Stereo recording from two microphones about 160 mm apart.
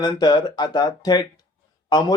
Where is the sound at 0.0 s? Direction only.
25° left (ahead or behind).